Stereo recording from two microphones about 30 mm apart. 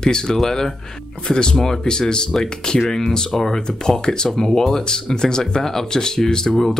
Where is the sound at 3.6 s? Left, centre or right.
Left.